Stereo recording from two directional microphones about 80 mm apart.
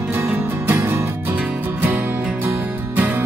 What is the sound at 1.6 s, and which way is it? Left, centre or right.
Music, right.